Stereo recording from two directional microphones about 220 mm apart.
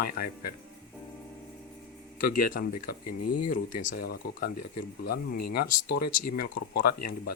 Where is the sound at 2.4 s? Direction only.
40° left (ahead or behind).